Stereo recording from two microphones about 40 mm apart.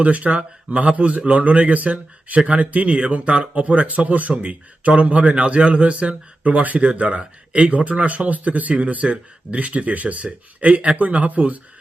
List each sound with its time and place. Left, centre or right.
0.0 s a man's voice: right